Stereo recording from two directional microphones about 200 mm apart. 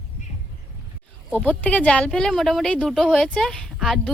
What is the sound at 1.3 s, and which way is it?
Speech, 5° left (ahead or behind).